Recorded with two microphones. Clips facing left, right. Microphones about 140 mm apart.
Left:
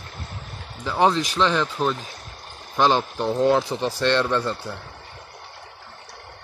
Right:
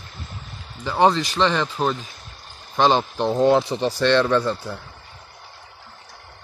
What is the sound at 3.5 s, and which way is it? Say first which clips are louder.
Speech: right 2 dB; centre (ahead or behind).